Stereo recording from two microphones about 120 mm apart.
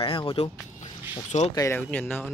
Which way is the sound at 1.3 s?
80° left.